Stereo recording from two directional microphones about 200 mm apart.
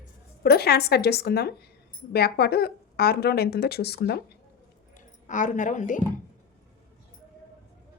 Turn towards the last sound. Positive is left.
turn(degrees=40)  # may be behind; listen again after turning